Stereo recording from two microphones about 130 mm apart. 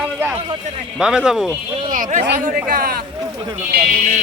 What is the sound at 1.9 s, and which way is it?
Speech, 80° right.